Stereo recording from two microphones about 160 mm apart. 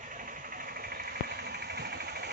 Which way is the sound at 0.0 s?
55° right (ahead or behind).